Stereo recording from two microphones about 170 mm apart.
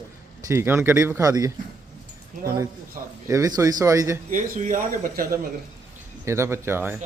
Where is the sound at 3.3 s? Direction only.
20° right (ahead or behind).